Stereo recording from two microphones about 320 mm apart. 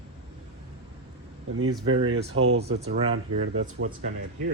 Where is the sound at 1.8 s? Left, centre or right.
Right.